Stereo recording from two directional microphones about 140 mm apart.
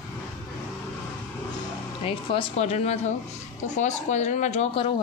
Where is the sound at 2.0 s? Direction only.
45° left (ahead or behind).